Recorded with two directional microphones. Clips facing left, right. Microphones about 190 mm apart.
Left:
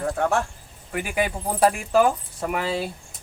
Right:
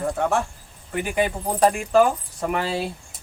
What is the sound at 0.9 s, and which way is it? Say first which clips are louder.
Speech: right 2 dB; 5° left (ahead or behind).